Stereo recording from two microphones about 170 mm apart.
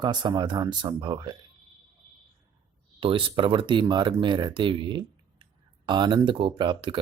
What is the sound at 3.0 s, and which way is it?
Speech, 30° right (ahead or behind).